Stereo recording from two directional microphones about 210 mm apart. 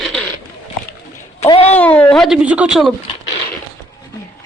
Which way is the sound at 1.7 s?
5° left (ahead or behind).